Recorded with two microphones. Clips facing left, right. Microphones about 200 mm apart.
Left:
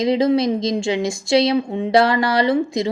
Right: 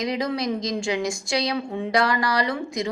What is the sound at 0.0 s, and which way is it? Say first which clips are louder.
A woman's voice: left 9 dB; 25° left (ahead or behind).